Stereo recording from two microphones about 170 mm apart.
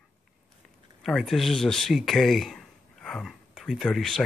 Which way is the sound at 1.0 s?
Centre (ahead or behind).